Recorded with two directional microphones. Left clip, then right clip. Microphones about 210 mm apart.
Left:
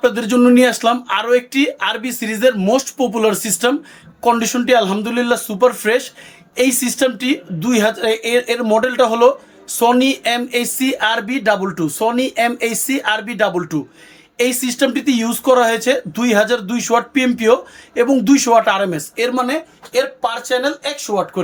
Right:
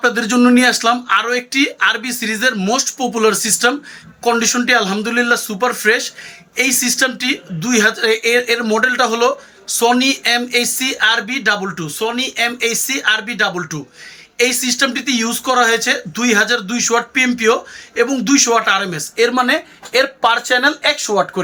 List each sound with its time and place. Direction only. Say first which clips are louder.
0.0 s speech: even; 15° left (ahead or behind)
19.1 s speech: right 6 dB; 5° left (ahead or behind)
20.0 s speech: right 4 dB; 35° right (ahead or behind)